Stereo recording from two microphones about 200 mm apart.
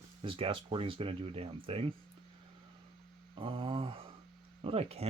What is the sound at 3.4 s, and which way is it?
Speech, 25° right (ahead or behind).